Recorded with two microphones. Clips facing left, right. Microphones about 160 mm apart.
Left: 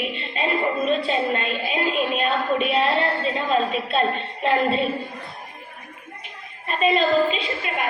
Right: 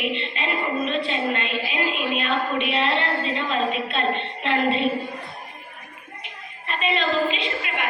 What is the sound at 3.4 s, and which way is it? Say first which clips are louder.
A woman's voice: left 5 dB; 40° left (ahead or behind).